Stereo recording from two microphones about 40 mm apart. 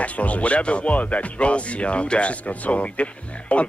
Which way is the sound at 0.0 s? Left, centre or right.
Left.